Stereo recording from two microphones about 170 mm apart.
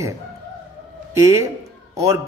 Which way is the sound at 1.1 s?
20° right (ahead or behind).